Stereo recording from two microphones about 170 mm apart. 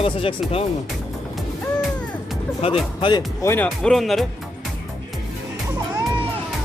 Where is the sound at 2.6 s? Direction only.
35° left (ahead or behind).